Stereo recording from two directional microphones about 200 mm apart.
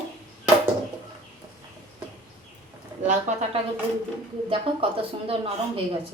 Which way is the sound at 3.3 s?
35° right (ahead or behind).